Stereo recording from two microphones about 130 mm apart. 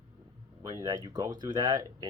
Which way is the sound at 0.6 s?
30° right (ahead or behind).